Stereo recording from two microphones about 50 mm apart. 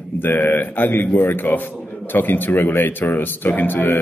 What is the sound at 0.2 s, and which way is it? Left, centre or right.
A man's voice, left.